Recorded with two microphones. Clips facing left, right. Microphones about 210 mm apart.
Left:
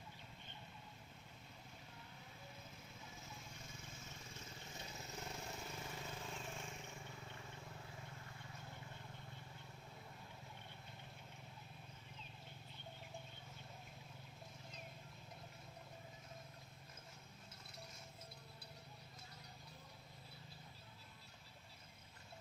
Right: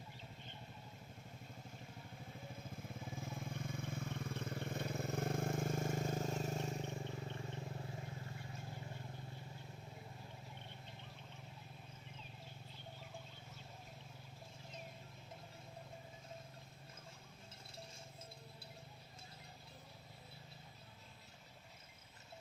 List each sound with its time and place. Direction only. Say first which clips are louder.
3.1 s vehicle: right 12 dB; 55° right (ahead or behind)
6.9 s wild animals: right 9 dB; 35° right (ahead or behind)